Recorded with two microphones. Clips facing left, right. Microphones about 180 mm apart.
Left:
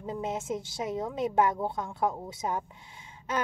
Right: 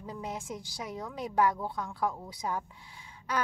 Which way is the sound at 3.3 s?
20° left (ahead or behind).